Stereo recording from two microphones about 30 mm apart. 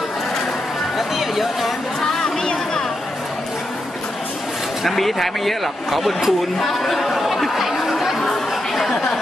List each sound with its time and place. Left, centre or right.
0.9 s a sound: centre
4.8 s speech: centre
8.2 s chatter: centre